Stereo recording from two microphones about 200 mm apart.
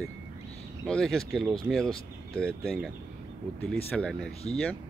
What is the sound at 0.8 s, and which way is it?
Speech, 5° left (ahead or behind).